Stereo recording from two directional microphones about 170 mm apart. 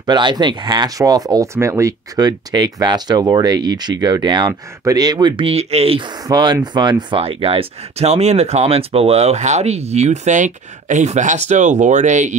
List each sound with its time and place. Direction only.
0.0 s speech: 25° right (ahead or behind)
6.2 s speech: 25° right (ahead or behind); by 12.4 s 45° right (ahead or behind)